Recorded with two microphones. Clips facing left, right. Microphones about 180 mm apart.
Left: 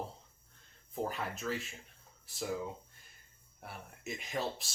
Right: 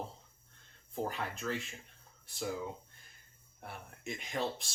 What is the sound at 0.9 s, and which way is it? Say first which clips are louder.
Speech: even; centre (ahead or behind).